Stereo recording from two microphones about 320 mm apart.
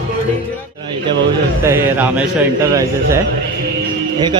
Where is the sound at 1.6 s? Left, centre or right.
Centre.